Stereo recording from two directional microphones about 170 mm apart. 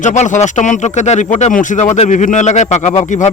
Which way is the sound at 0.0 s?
45° left (ahead or behind).